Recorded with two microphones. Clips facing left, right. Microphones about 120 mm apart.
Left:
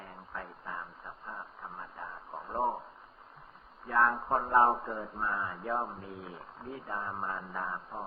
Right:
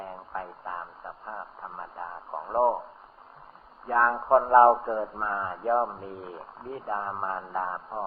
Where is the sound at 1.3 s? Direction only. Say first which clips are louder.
Right 5 dB; 45° right (ahead or behind).